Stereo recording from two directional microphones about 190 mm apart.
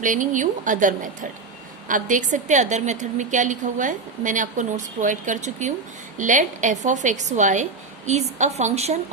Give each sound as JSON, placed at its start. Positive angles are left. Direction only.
{"t": 0.0, "sound": "a woman's voice", "side_deg": -45}